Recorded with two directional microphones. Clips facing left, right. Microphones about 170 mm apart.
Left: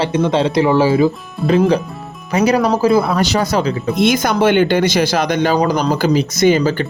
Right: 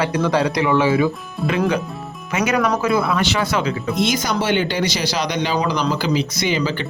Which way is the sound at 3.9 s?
55° left (ahead or behind).